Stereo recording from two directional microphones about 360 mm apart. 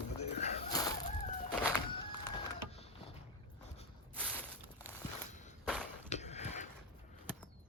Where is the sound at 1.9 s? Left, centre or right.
Centre.